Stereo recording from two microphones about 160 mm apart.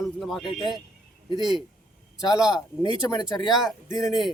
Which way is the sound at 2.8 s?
25° left (ahead or behind).